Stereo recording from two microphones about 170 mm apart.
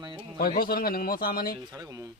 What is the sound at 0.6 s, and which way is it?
Speech, 60° left (ahead or behind).